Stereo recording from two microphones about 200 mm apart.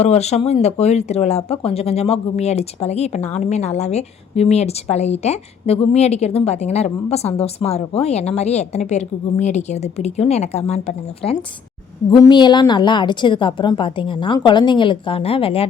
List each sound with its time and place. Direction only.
0.0 s speech: 35° left (ahead or behind)
12.1 s a woman's voice: 20° left (ahead or behind)